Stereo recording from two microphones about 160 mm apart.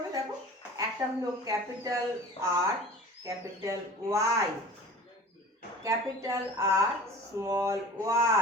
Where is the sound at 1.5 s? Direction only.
20° right (ahead or behind).